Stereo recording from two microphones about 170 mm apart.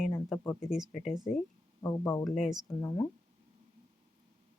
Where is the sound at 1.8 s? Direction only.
15° left (ahead or behind).